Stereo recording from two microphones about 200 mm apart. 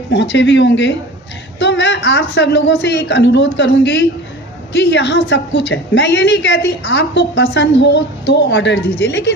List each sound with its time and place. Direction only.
0.1 s a woman's voice: 60° left (ahead or behind)